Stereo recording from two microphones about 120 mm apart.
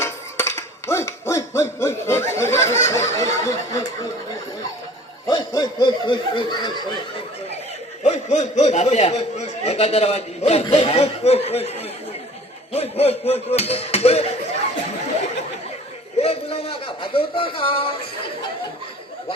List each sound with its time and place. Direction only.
0.0 s hoot: 20° left (ahead or behind)
2.3 s speech: 20° left (ahead or behind)
5.3 s speech: 35° left (ahead or behind)
8.0 s speech: 70° left (ahead or behind)
16.1 s a sound: 60° left (ahead or behind)